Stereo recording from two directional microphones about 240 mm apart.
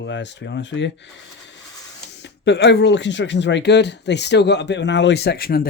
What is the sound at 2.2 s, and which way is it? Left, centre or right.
Speech, left.